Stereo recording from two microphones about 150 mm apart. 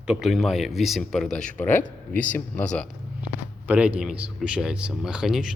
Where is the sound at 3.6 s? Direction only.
10° right (ahead or behind).